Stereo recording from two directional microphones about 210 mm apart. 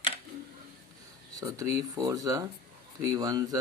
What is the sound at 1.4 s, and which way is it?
Speech, 15° right (ahead or behind).